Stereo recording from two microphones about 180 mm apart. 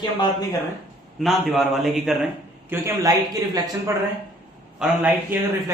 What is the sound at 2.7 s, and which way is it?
A man's voice, 15° right (ahead or behind).